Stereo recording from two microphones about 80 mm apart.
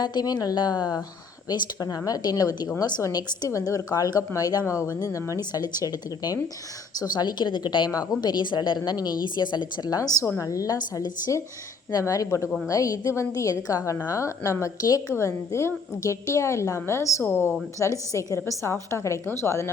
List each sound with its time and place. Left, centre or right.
0.0 s a woman's voice: left
2.0 s a woman's voice: left
5.4 s a woman's voice: left
7.9 s a woman's voice: left
15.1 s a woman's voice: left
17.7 s a woman's voice: left
18.3 s a woman's voice: left